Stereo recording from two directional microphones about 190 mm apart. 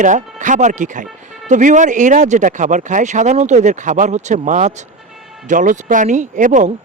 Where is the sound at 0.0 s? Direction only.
40° right (ahead or behind).